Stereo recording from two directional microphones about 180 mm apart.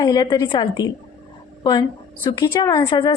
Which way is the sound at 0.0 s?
20° left (ahead or behind).